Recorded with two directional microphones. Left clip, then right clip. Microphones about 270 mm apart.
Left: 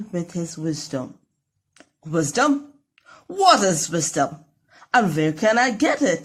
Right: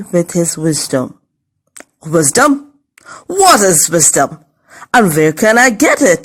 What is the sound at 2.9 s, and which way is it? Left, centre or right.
Speech, right.